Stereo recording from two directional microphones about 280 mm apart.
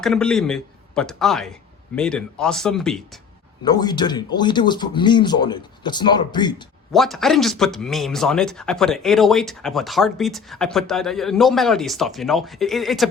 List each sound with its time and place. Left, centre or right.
0.0 s speech: centre
3.6 s speech: centre
6.9 s speech: centre